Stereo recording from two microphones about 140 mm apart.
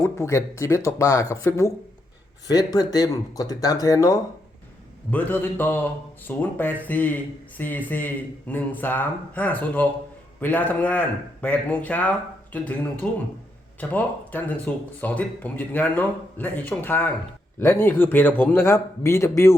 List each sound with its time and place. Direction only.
0.0 s speech: 20° left (ahead or behind)
5.1 s a man's voice: 15° left (ahead or behind)